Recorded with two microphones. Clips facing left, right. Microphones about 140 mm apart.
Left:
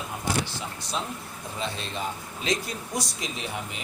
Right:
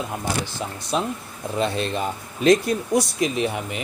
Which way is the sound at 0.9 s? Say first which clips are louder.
Right 9 dB; 65° right (ahead or behind).